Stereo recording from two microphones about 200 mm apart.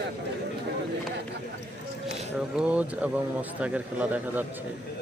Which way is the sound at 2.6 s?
5° right (ahead or behind).